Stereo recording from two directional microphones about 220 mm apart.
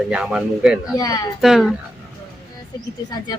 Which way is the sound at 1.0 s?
15° left (ahead or behind).